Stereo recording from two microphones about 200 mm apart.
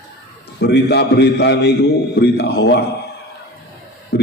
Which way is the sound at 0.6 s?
55° left (ahead or behind).